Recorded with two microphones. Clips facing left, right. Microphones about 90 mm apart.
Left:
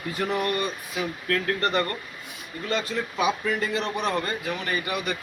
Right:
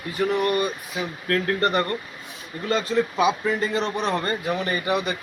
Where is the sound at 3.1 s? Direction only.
20° right (ahead or behind).